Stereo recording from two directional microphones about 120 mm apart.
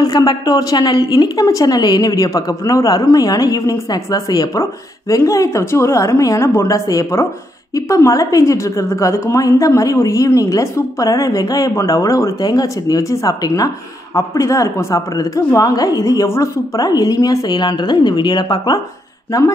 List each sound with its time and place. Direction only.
0.0 s a woman's voice: 35° left (ahead or behind)